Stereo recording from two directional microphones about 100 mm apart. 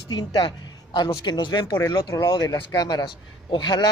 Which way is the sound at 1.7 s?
35° left (ahead or behind).